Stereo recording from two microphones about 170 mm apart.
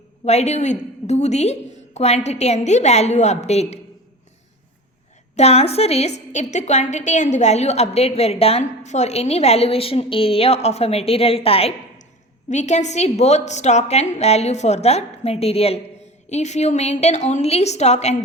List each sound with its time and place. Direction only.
0.3 s a woman's voice: 40° left (ahead or behind)
5.4 s a woman's voice: 40° left (ahead or behind)